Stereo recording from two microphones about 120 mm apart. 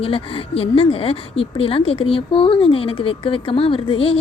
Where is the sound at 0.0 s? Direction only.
50° left (ahead or behind).